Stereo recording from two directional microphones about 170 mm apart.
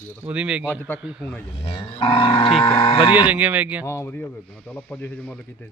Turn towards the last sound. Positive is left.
turn(degrees=10)  # may be behind; listen again after turning